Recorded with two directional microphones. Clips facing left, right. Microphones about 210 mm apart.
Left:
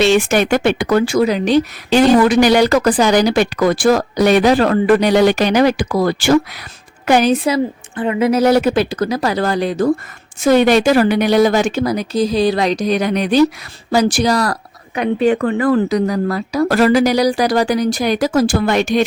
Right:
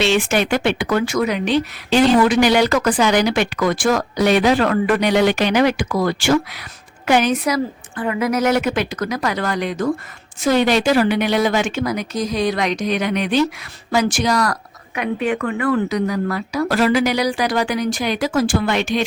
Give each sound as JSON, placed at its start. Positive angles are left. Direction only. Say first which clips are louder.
{"t": 0.0, "sound": "speech", "louder": "left 4 dB", "side_deg": 45}
{"t": 10.4, "sound": "speech", "louder": "left 5 dB", "side_deg": 50}